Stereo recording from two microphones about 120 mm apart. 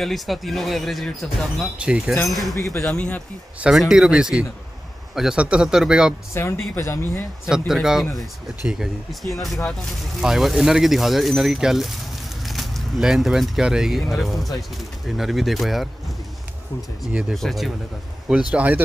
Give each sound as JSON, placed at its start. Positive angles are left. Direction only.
{"t": 0.0, "sound": "a man's voice", "side_deg": 0}
{"t": 2.5, "sound": "speech", "side_deg": 25}
{"t": 2.8, "sound": "speech", "side_deg": 10}
{"t": 3.6, "sound": "a man's voice", "side_deg": -5}
{"t": 6.3, "sound": "speech", "side_deg": 20}
{"t": 7.4, "sound": "speech", "side_deg": -5}
{"t": 17.0, "sound": "a man's voice", "side_deg": -5}